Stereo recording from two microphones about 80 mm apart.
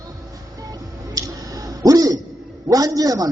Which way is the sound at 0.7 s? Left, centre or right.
Right.